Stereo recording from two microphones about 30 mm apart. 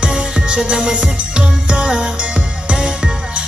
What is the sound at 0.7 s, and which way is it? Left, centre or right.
Music, right.